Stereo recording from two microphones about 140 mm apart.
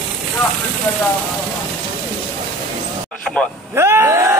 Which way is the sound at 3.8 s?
20° right (ahead or behind).